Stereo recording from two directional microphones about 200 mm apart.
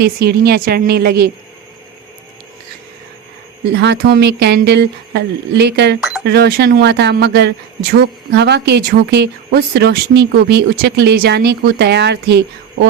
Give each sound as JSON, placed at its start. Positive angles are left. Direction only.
{"t": 0.0, "sound": "a woman's voice", "side_deg": -55}
{"t": 3.7, "sound": "speech", "side_deg": -55}
{"t": 6.0, "sound": "chink", "side_deg": -5}
{"t": 6.2, "sound": "speech", "side_deg": -55}